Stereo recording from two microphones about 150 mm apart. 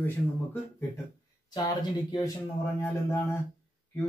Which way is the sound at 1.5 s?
30° left (ahead or behind).